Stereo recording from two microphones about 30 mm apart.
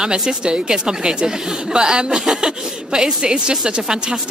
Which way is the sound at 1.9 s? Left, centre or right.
Right.